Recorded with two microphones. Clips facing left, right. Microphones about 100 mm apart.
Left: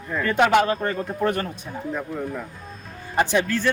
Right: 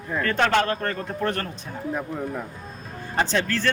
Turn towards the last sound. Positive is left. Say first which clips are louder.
# left 2 dB
turn(degrees=15)  # may be behind; listen again after turning